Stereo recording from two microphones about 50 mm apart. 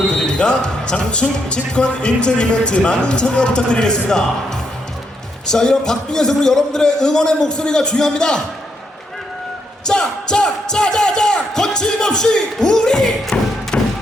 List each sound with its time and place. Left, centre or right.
0.1 s a man's voice: centre
9.8 s speech: centre